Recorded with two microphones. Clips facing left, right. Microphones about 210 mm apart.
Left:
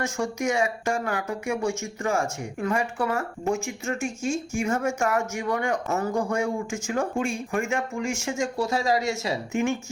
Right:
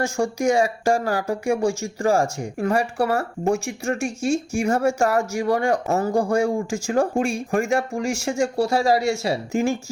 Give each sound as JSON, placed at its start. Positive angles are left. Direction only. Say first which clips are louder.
{"t": 0.0, "sound": "speech", "louder": "right 5 dB", "side_deg": -35}
{"t": 4.6, "sound": "speech", "louder": "right 5 dB", "side_deg": -35}